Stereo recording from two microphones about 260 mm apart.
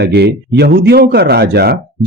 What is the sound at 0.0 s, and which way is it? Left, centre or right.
Speech, right.